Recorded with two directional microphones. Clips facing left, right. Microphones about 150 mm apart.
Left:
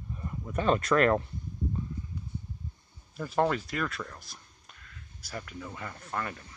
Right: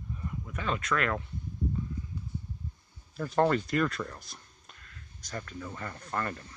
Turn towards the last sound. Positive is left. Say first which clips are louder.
# right 1 dB
turn(degrees=5)  # may be behind; listen again after turning